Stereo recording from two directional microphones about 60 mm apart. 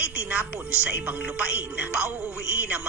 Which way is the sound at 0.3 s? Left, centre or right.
Right.